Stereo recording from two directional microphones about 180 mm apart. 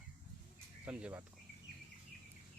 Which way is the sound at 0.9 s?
5° right (ahead or behind).